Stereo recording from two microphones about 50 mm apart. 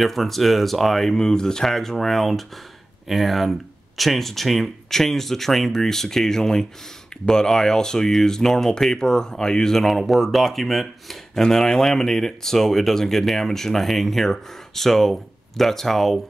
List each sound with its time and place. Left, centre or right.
0.0 s speech: centre